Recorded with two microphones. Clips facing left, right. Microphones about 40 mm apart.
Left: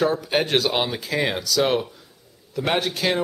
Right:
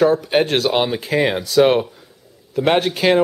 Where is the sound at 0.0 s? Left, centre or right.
Centre.